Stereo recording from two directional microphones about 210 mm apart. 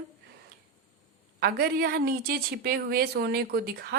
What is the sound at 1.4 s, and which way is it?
A woman's voice, 50° right (ahead or behind).